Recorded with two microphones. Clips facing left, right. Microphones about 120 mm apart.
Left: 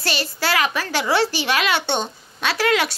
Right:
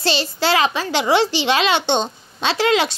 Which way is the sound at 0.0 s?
25° right (ahead or behind).